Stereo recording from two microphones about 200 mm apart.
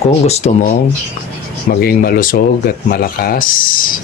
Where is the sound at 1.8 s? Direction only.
50° left (ahead or behind).